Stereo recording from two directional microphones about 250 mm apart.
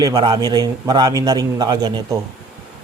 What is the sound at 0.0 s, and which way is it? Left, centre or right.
A man's voice, centre.